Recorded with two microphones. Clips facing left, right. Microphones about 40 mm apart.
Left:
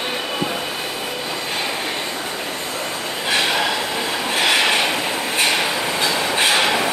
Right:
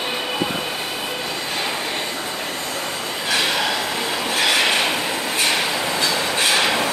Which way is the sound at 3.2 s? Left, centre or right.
Centre.